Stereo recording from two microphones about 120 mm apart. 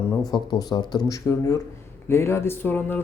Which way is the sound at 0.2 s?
35° left (ahead or behind).